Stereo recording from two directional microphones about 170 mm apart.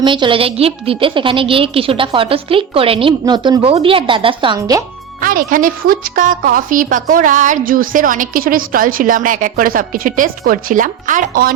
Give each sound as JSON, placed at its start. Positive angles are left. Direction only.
{"t": 0.0, "sound": "a woman's voice", "side_deg": -30}
{"t": 5.2, "sound": "a woman's voice", "side_deg": -55}